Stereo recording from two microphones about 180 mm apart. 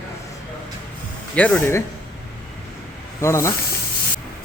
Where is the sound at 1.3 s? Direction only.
5° left (ahead or behind).